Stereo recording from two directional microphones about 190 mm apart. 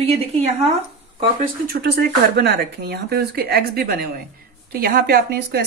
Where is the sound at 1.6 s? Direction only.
55° right (ahead or behind).